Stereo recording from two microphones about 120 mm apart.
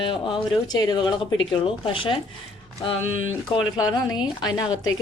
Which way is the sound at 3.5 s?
40° left (ahead or behind).